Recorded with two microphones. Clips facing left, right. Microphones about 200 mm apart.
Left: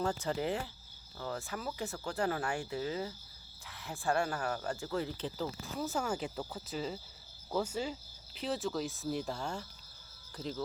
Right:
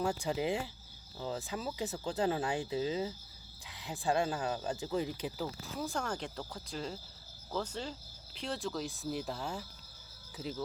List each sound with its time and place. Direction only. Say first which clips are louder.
0.0 s speech: right 1 dB; 10° right (ahead or behind)
5.6 s speech: left 3 dB; 5° left (ahead or behind)